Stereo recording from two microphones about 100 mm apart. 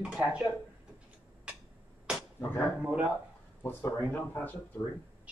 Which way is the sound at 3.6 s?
20° left (ahead or behind).